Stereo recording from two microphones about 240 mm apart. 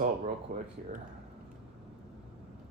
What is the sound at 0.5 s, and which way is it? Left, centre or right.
Speech, right.